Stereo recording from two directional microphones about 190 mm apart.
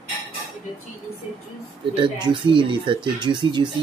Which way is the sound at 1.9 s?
25° right (ahead or behind).